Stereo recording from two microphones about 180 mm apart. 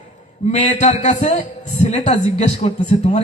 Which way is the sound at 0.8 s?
40° left (ahead or behind).